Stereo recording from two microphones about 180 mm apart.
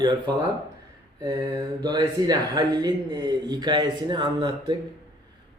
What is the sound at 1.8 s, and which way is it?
A man's voice, 20° right (ahead or behind).